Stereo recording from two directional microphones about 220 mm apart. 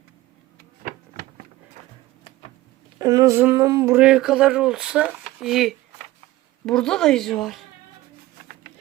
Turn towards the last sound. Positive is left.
turn(degrees=0)  # may be behind; listen again after turning